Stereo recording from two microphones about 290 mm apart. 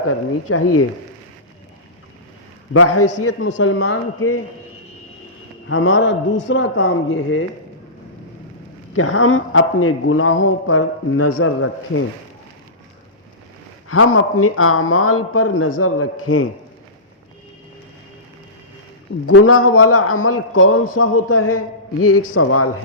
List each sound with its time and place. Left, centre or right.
0.1 s speech: left
2.7 s speech: left
5.6 s speech: left
8.9 s speech: left
13.8 s speech: left
19.2 s speech: left